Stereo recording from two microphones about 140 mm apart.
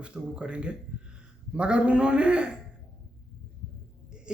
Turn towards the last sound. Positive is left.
turn(degrees=-5)  # may be behind; listen again after turning